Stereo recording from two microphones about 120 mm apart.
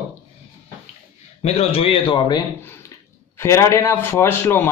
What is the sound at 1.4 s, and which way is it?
Speech, 55° left (ahead or behind).